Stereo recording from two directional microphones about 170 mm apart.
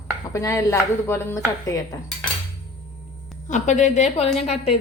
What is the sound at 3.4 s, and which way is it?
Speech, 45° left (ahead or behind).